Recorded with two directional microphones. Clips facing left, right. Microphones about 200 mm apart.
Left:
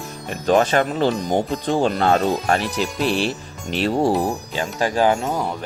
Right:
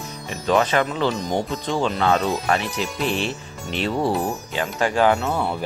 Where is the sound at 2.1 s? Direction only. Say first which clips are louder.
Left 2 dB; 50° left (ahead or behind).